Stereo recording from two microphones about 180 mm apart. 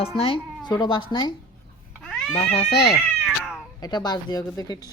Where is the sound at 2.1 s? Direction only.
5° left (ahead or behind).